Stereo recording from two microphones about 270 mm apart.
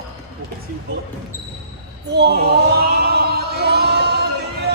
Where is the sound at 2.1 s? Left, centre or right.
Right.